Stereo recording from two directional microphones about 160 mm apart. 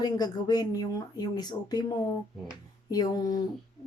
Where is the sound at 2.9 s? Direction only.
25° left (ahead or behind).